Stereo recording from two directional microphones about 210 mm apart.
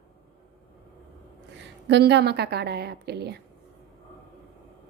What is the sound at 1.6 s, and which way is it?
A woman's voice, 55° right (ahead or behind).